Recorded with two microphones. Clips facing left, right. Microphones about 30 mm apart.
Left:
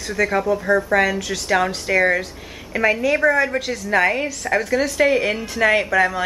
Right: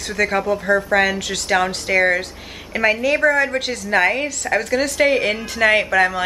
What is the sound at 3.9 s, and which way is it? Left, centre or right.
Speech, centre.